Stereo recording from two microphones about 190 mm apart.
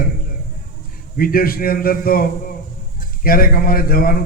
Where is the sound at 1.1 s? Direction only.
50° left (ahead or behind).